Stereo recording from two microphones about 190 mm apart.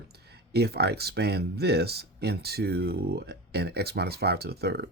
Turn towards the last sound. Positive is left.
turn(degrees=-60)  # may be behind; listen again after turning